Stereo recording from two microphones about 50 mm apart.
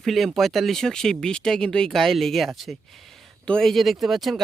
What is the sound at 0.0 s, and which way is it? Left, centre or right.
Speech, centre.